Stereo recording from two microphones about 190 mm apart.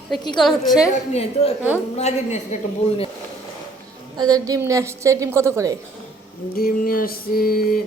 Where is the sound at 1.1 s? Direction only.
30° left (ahead or behind).